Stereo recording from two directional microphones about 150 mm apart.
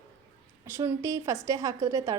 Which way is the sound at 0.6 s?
15° right (ahead or behind).